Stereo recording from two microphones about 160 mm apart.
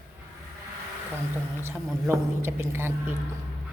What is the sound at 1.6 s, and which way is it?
Speech, 15° right (ahead or behind).